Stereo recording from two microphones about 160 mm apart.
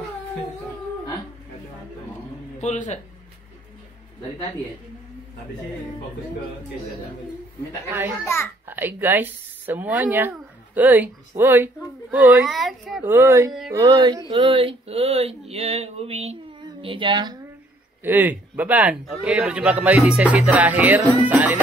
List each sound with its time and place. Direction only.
2.6 s speech: 45° left (ahead or behind)
8.2 s a child's voice: 15° left (ahead or behind)
8.6 s speech: 10° right (ahead or behind)
13.0 s speech: 15° right (ahead or behind)
13.7 s a sound: 20° right (ahead or behind); by 16.3 s 40° right (ahead or behind)
16.8 s speech: 30° right (ahead or behind)
18.0 s speech: 10° right (ahead or behind)